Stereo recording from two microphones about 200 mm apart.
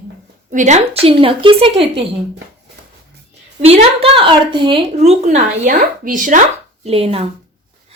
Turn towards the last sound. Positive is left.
turn(degrees=-30)  # may be behind; listen again after turning